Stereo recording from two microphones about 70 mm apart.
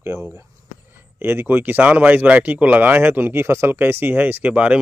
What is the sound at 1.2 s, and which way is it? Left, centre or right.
Speech, right.